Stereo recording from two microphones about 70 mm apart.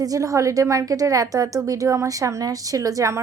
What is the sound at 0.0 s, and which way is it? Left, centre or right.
A woman's voice, right.